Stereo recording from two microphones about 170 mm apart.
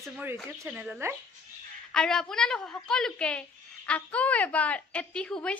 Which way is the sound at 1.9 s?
5° left (ahead or behind).